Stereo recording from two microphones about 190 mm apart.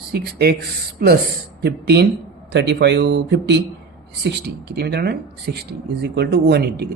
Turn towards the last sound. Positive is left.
turn(degrees=-55)  # may be behind; listen again after turning